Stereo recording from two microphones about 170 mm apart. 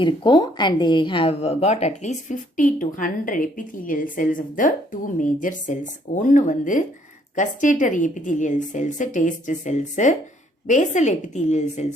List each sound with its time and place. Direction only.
0.0 s a woman's voice: 25° left (ahead or behind); by 11.9 s 45° left (ahead or behind)